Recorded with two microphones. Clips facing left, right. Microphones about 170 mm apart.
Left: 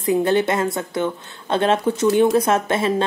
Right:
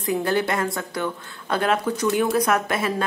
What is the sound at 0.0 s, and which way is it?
A woman's voice, 25° left (ahead or behind).